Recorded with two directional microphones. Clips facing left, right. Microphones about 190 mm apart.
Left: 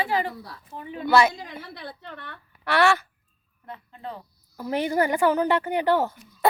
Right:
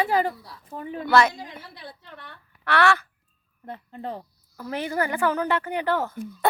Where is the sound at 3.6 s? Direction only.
40° right (ahead or behind).